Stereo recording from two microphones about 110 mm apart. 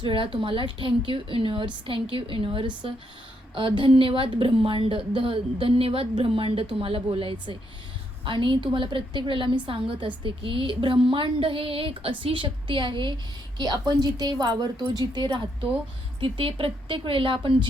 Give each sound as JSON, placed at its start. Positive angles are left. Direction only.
{"t": 0.0, "sound": "a woman's voice", "side_deg": -50}
{"t": 16.2, "sound": "a woman's voice", "side_deg": -55}